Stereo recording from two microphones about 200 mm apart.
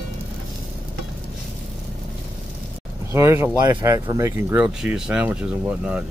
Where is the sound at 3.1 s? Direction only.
15° right (ahead or behind).